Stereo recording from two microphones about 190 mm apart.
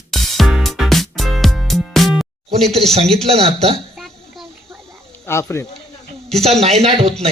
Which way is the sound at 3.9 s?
Centre (ahead or behind).